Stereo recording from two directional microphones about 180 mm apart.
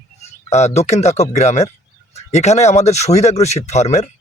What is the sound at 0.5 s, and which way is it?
Speech, 40° left (ahead or behind).